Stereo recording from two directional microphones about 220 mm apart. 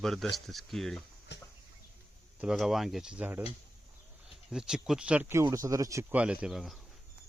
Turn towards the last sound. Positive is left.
turn(degrees=0)  # may be behind; listen again after turning